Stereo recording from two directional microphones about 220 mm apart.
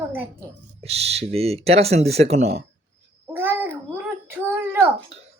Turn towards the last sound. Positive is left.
turn(degrees=-10)  # may be behind; listen again after turning